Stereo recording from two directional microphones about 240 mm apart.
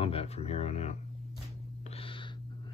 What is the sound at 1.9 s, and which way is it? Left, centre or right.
Gasp, left.